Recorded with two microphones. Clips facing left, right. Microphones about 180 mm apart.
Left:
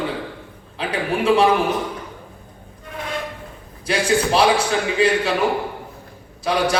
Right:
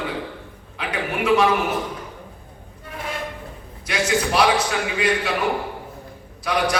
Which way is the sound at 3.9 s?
30° left (ahead or behind).